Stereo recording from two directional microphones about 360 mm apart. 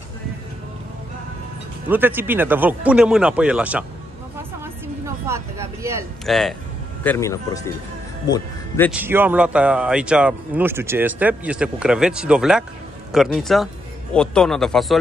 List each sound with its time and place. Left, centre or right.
1.9 s speech: centre
5.0 s speech: centre
9.0 s speech: centre